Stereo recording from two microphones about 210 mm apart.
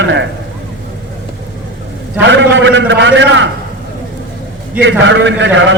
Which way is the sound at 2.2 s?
60° right (ahead or behind).